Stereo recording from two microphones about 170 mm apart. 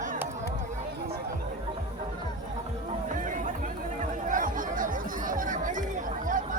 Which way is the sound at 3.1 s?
50° right (ahead or behind).